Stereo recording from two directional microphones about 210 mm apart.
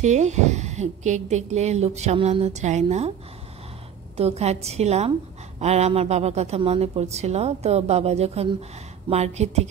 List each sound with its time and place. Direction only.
0.0 s a woman's voice: 35° right (ahead or behind)
4.2 s a woman's voice: 30° right (ahead or behind)